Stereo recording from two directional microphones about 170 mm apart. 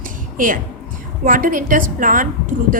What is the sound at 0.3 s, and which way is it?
A woman's voice, 50° right (ahead or behind).